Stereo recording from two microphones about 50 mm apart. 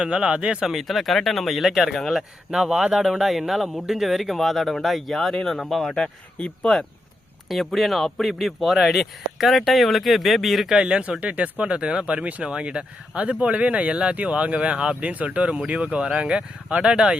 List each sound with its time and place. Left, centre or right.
0.0 s speech: centre
0.6 s speech: centre
2.1 s speech: centre
6.0 s speech: centre
7.4 s speech: centre
10.7 s speech: centre